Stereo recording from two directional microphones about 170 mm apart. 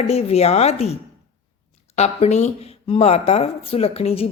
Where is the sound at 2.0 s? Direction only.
40° left (ahead or behind).